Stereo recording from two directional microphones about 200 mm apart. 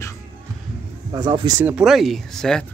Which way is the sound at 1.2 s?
20° right (ahead or behind).